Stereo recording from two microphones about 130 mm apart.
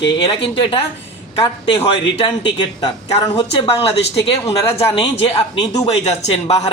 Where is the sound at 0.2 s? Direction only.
40° left (ahead or behind).